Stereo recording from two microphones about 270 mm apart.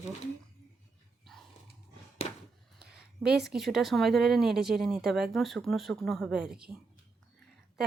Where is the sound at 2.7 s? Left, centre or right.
Centre.